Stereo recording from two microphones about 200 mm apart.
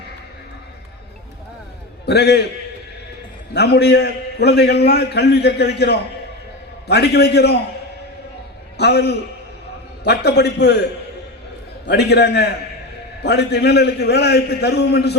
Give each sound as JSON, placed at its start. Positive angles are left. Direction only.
{"t": 2.0, "sound": "a man's voice", "side_deg": 55}
{"t": 3.5, "sound": "a man's voice", "side_deg": 55}
{"t": 8.8, "sound": "a man's voice", "side_deg": 55}
{"t": 11.9, "sound": "a man's voice", "side_deg": 55}